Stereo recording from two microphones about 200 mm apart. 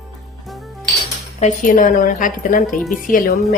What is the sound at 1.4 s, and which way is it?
A woman's voice, 40° left (ahead or behind).